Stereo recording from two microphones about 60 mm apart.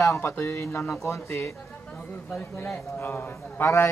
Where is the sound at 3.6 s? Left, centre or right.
Left.